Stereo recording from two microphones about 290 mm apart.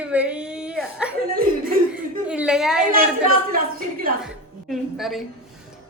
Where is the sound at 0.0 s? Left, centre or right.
Centre.